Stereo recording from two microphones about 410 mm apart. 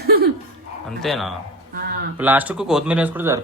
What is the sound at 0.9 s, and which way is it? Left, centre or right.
Speech, centre.